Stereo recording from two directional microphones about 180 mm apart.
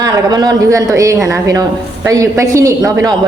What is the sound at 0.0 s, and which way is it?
A woman's voice, 20° right (ahead or behind).